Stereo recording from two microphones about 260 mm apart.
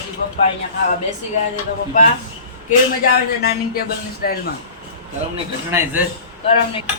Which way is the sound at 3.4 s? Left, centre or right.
Left.